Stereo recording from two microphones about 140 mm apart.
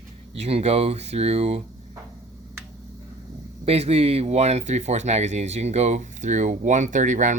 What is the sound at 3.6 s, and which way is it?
Speech, 45° right (ahead or behind).